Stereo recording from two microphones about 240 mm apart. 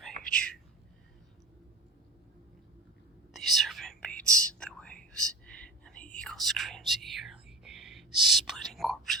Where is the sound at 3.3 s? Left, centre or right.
Centre.